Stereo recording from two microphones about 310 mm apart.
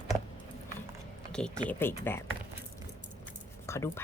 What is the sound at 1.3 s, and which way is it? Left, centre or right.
Speech, centre.